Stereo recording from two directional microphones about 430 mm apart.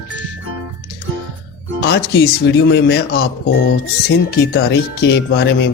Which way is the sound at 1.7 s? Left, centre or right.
Left.